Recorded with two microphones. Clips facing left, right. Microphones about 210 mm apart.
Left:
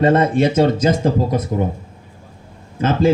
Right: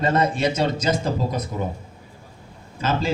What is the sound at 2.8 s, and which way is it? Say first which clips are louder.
Speech: left 8 dB; 55° left (ahead or behind).